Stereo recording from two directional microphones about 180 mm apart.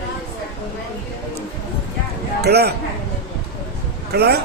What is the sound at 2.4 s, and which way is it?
Speech, 65° right (ahead or behind).